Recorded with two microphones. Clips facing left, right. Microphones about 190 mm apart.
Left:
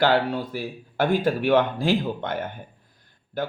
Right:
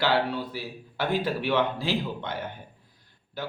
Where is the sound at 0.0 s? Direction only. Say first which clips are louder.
Left 4 dB; 45° left (ahead or behind).